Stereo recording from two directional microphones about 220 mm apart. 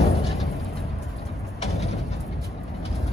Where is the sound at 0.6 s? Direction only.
Centre (ahead or behind).